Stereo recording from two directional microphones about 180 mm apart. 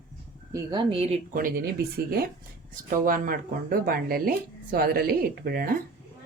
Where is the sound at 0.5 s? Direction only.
25° right (ahead or behind).